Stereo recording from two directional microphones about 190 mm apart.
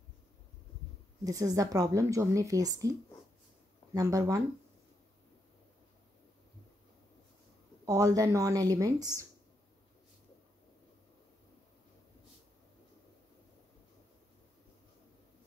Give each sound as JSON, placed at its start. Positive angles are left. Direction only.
{"t": 1.2, "sound": "a woman's voice", "side_deg": -20}
{"t": 3.9, "sound": "a woman's voice", "side_deg": -20}
{"t": 7.8, "sound": "a woman's voice", "side_deg": -15}